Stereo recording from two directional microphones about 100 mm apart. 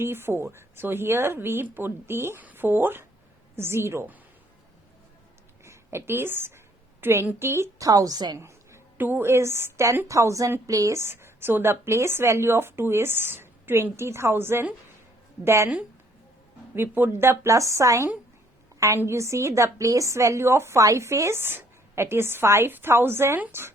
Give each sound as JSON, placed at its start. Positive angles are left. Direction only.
{"t": 0.0, "sound": "a woman's voice", "side_deg": -25}
{"t": 5.6, "sound": "a woman's voice", "side_deg": -25}
{"t": 8.4, "sound": "a woman's voice", "side_deg": -30}
{"t": 16.7, "sound": "a woman's voice", "side_deg": -20}